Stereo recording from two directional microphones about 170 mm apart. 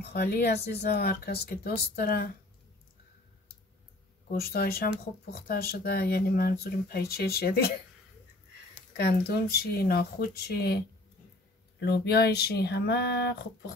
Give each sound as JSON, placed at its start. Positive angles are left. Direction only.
{"t": 0.0, "sound": "speech", "side_deg": 70}
{"t": 4.3, "sound": "speech", "side_deg": 65}
{"t": 8.9, "sound": "speech", "side_deg": 65}
{"t": 11.8, "sound": "speech", "side_deg": 75}